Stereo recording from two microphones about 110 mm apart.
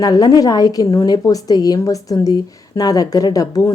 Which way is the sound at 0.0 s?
35° left (ahead or behind).